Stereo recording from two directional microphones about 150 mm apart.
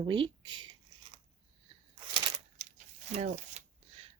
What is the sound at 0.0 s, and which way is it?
Speech, 35° right (ahead or behind).